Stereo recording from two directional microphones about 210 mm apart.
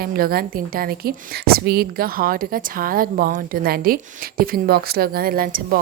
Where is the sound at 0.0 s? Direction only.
45° right (ahead or behind).